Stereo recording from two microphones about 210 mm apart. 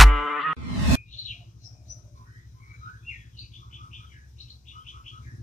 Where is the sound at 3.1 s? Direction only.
35° left (ahead or behind).